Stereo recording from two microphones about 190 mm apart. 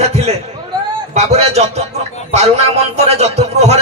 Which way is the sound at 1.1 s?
35° right (ahead or behind).